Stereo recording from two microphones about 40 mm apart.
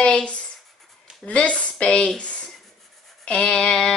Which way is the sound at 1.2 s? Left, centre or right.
Left.